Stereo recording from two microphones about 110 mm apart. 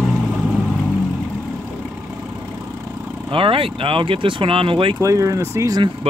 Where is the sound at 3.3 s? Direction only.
55° right (ahead or behind).